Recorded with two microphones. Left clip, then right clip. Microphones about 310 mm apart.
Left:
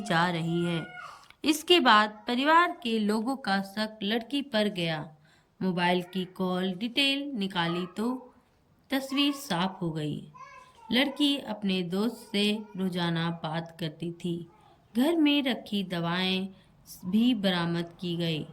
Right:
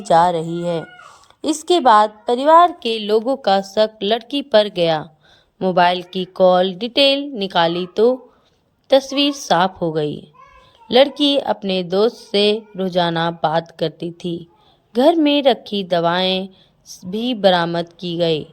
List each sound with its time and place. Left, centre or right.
0.1 s a woman's voice: centre
8.9 s speech: centre
14.9 s speech: centre